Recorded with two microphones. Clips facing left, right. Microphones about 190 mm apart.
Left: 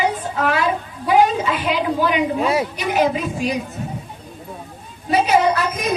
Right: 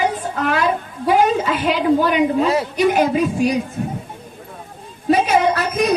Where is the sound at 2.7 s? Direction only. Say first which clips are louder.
Right 3 dB; 45° right (ahead or behind).